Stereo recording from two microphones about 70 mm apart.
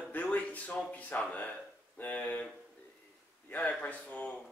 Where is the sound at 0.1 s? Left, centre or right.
Left.